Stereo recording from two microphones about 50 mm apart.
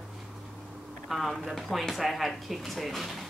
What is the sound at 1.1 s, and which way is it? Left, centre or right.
Speech, centre.